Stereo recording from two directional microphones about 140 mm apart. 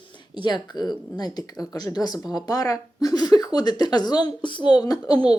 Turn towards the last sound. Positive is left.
turn(degrees=30)  # may be behind; listen again after turning